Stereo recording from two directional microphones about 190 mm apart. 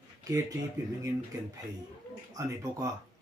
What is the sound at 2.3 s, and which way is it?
Speech, 15° right (ahead or behind).